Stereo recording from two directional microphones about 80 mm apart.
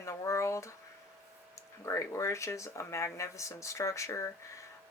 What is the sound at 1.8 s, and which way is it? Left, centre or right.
Speech, left.